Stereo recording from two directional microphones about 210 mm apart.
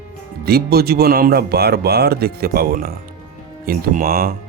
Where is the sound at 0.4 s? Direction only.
50° right (ahead or behind).